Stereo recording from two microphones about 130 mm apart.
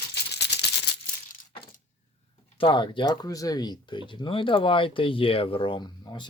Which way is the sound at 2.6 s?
40° left (ahead or behind).